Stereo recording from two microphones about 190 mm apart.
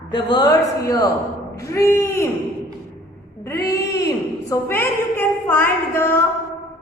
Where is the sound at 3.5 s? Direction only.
15° left (ahead or behind).